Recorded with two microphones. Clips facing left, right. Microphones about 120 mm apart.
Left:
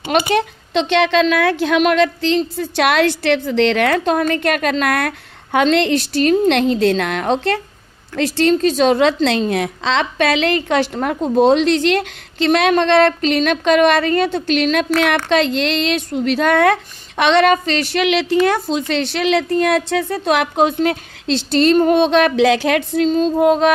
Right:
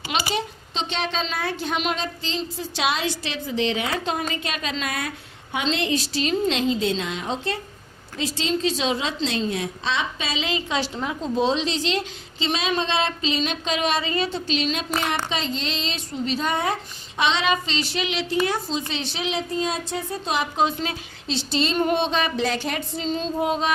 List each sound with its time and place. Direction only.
0.1 s a woman's voice: 60° left (ahead or behind); by 1.8 s 85° left
1.8 s a woman's voice: 70° left (ahead or behind)
21.8 s a woman's voice: 50° left (ahead or behind); by 23.0 s 90° left
23.0 s a woman's voice: 50° left (ahead or behind)